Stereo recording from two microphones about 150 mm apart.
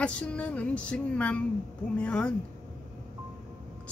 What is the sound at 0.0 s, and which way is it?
Music, 10° left (ahead or behind).